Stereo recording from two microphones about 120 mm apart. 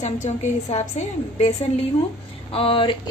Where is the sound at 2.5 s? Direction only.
50° left (ahead or behind).